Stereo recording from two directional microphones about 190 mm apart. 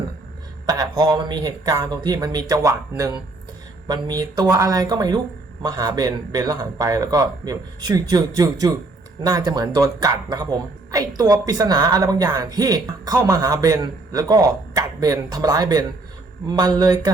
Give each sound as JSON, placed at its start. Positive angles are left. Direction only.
{"t": 0.6, "sound": "a woman's voice", "side_deg": -20}